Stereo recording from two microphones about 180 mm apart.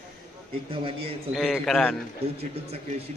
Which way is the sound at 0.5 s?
30° right (ahead or behind).